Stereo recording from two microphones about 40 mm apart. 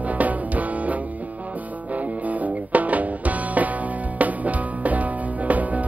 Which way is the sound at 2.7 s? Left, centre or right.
Right.